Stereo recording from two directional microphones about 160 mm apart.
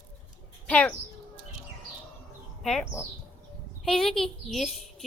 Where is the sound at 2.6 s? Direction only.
Centre (ahead or behind).